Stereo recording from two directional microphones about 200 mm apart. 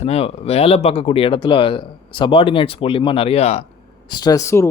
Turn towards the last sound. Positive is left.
turn(degrees=15)  # may be behind; listen again after turning